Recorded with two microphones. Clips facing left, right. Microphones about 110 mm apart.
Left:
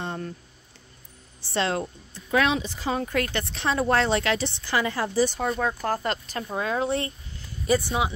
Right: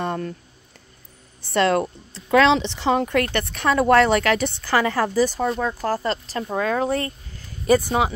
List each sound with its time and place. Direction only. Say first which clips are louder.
0.0 s a sound: right 6 dB; 60° right (ahead or behind)
1.5 s speech: right 7 dB; 60° right (ahead or behind)
5.2 s speech: left 1 dB; 40° right (ahead or behind)
6.5 s speech: right 4 dB; 50° right (ahead or behind)